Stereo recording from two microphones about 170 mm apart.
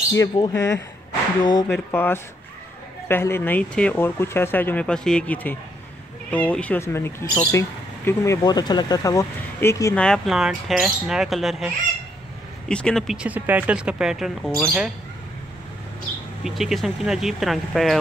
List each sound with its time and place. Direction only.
0.1 s speech: 20° left (ahead or behind)
1.7 s speech: 10° left (ahead or behind)
9.9 s speech: 5° left (ahead or behind)
16.4 s speech: centre (ahead or behind)